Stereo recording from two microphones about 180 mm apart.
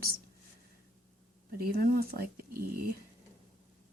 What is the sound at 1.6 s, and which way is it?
Speech, 55° right (ahead or behind).